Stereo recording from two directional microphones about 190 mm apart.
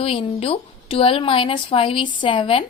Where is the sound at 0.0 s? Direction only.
30° left (ahead or behind).